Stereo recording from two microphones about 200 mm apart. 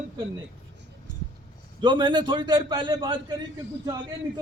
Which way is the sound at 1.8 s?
25° right (ahead or behind).